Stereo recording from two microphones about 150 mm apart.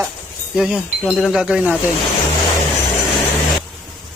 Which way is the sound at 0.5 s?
5° right (ahead or behind).